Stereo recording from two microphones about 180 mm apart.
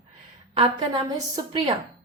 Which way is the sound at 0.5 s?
30° right (ahead or behind).